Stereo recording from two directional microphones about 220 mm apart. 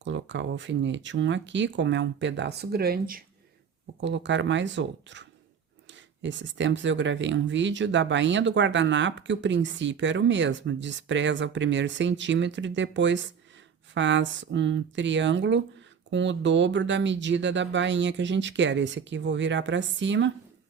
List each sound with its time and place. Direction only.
0.0 s speech: 55° right (ahead or behind)
4.0 s speech: 55° right (ahead or behind)